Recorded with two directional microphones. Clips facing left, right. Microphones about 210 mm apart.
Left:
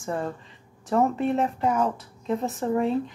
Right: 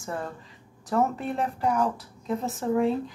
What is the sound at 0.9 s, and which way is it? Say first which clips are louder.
Speech: left 4 dB; centre (ahead or behind).